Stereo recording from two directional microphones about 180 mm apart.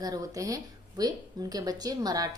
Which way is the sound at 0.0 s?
20° right (ahead or behind).